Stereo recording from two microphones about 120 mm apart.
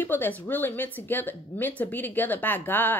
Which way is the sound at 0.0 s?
15° left (ahead or behind).